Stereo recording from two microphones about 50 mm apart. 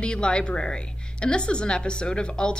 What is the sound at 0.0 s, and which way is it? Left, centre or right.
A woman's voice, centre.